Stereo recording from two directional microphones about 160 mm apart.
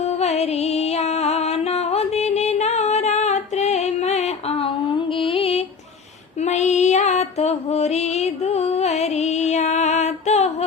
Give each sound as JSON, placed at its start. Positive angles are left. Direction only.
{"t": 0.0, "sound": "music", "side_deg": 40}